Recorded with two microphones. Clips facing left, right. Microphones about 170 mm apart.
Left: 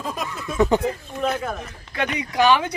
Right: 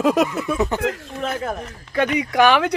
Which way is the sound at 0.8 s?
90° right.